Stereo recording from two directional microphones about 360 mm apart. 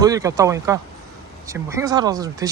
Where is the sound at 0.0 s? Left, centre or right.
Centre.